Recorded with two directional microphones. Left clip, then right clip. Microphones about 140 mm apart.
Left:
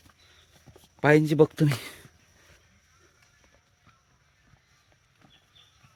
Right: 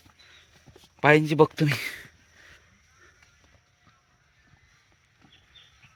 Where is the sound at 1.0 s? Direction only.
35° left (ahead or behind).